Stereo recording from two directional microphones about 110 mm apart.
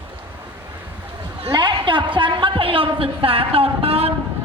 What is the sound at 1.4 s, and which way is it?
A woman's voice, 45° right (ahead or behind).